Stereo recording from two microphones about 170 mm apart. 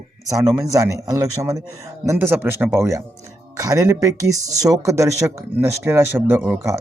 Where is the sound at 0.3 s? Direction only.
20° right (ahead or behind).